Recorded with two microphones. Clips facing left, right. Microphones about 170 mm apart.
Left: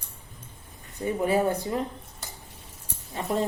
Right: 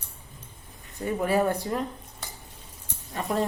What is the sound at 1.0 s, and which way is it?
Speech, 20° left (ahead or behind).